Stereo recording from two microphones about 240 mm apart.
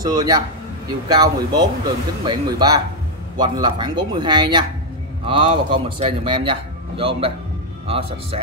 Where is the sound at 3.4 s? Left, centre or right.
Centre.